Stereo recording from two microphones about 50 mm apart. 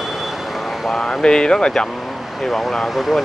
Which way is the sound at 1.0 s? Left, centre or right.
Centre.